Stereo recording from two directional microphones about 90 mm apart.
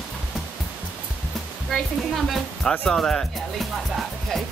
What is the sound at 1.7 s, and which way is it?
Speech, centre (ahead or behind).